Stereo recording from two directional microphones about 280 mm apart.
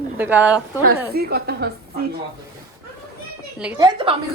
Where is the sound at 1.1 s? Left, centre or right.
Right.